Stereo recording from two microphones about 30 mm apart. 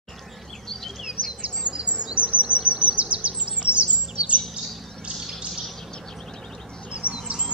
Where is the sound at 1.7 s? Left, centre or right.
Right.